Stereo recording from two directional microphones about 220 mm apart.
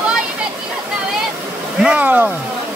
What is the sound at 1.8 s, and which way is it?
Speech, 5° right (ahead or behind).